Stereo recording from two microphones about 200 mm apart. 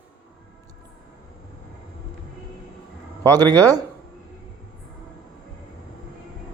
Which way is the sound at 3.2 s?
20° right (ahead or behind).